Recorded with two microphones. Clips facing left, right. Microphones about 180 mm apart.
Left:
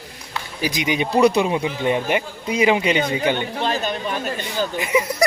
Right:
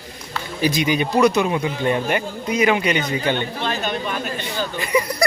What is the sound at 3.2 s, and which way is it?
Speech, 10° left (ahead or behind).